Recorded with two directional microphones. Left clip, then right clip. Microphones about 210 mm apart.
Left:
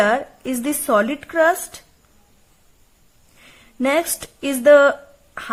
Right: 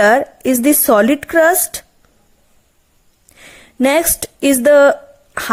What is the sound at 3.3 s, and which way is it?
Speech, 30° right (ahead or behind).